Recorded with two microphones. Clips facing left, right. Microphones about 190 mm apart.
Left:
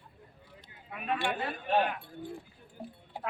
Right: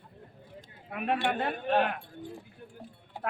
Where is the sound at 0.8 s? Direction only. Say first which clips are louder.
Right 3 dB; 60° right (ahead or behind).